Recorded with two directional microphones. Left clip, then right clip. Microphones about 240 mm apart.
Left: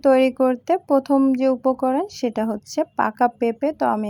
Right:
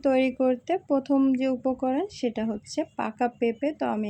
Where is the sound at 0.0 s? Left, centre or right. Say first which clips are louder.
Left 7 dB; centre.